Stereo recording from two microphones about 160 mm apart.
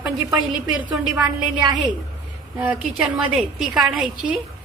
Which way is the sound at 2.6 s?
10° right (ahead or behind).